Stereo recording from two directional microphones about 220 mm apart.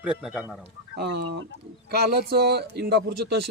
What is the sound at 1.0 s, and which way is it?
Speech, 45° right (ahead or behind).